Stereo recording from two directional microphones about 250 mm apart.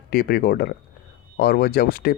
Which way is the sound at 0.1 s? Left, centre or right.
Left.